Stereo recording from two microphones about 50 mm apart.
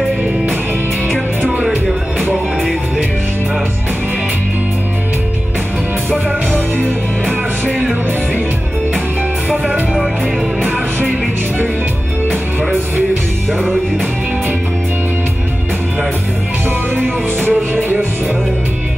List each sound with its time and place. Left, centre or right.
10.6 s music: right
16.9 s music: right